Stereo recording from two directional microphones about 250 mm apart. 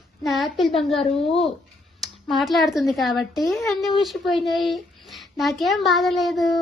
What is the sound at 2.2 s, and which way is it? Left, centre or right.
A woman's voice, centre.